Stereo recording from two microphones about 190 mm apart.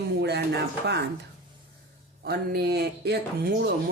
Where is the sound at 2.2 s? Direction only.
55° right (ahead or behind).